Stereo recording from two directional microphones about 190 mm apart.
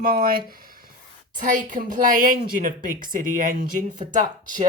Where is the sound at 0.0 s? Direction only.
50° right (ahead or behind).